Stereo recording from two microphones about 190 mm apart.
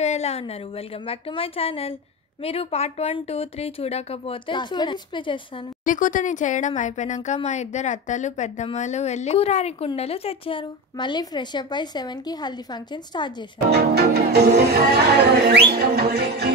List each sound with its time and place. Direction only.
0.0 s speech: 35° left (ahead or behind)
5.9 s speech: 45° left (ahead or behind); by 13.5 s 25° left (ahead or behind)
13.7 s speech: 60° right (ahead or behind)